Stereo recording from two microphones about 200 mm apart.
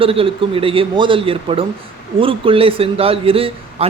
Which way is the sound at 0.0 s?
25° right (ahead or behind).